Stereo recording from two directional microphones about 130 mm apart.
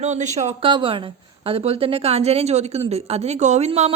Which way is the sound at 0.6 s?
40° right (ahead or behind).